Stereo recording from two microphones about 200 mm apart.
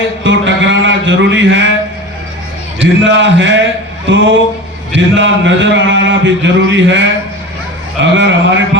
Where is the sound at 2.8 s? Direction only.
65° right (ahead or behind).